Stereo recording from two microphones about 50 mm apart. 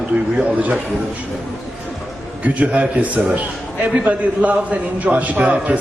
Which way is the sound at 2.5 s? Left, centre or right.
Right.